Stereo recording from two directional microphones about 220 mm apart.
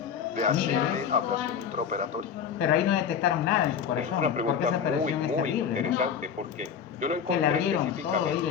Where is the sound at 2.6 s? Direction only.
Centre (ahead or behind).